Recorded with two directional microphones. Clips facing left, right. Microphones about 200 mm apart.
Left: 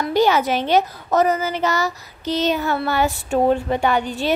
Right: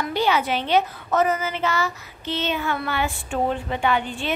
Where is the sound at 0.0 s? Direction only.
40° left (ahead or behind).